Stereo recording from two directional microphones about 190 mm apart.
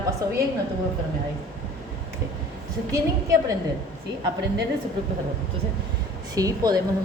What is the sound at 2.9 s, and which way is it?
Speech, 15° right (ahead or behind).